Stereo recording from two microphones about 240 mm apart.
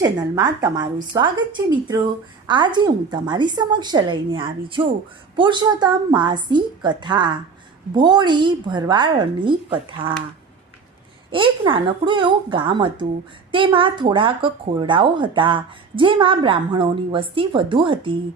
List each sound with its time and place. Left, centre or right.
0.0 s a woman's voice: centre
11.3 s a woman's voice: right